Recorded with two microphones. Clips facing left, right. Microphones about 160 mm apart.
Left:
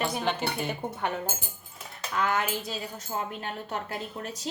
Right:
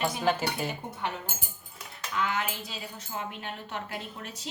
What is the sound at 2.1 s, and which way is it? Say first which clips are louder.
A woman's voice: left 3 dB; 45° left (ahead or behind).